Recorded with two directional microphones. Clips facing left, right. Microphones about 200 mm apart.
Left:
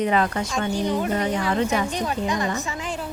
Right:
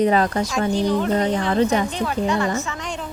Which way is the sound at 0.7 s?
10° left (ahead or behind).